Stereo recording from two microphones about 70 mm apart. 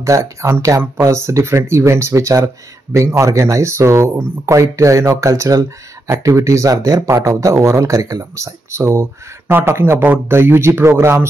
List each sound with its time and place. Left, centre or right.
0.0 s speech: right
6.7 s speech: right
7.2 s speech: right